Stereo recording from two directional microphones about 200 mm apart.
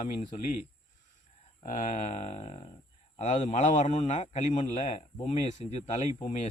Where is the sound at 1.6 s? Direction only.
35° left (ahead or behind).